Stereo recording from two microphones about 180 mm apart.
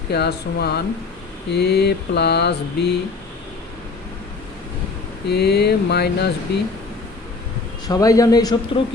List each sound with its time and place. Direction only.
0.1 s mantra: 65° left (ahead or behind)
5.3 s mantra: 65° left (ahead or behind)
7.9 s a man's voice: 20° left (ahead or behind)